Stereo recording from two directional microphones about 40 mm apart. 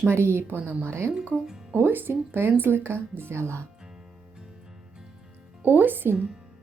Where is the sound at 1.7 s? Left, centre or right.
Right.